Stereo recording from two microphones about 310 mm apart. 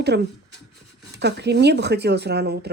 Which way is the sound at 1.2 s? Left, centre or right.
Right.